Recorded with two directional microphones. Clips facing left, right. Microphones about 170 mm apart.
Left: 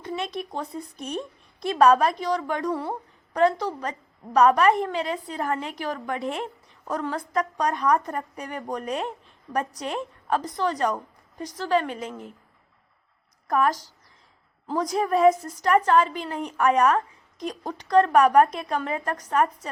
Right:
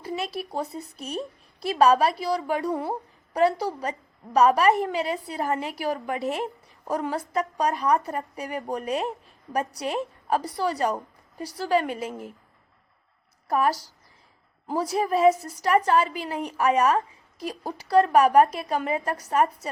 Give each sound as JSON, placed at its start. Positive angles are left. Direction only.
{"t": 0.0, "sound": "a woman's voice", "side_deg": -5}
{"t": 13.5, "sound": "a woman's voice", "side_deg": -10}